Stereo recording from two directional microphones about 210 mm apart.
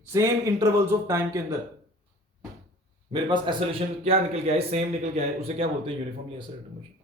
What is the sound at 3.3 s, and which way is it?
A man's voice, 25° right (ahead or behind).